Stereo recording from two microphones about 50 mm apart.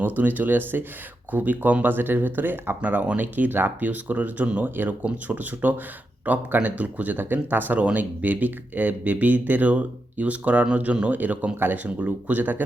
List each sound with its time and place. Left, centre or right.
0.2 s speech: right
2.8 s speech: right
7.8 s speech: right
9.6 s speech: right